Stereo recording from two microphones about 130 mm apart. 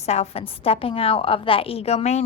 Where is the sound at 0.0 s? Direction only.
55° left (ahead or behind).